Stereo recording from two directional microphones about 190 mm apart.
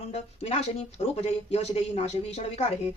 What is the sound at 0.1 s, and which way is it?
Speech, 35° left (ahead or behind).